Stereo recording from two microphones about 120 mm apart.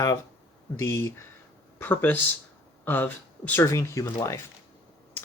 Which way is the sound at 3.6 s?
25° left (ahead or behind).